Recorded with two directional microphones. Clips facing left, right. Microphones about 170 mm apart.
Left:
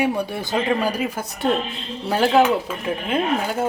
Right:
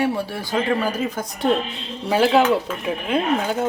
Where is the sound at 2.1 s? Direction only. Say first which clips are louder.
Right 1 dB; 5° right (ahead or behind).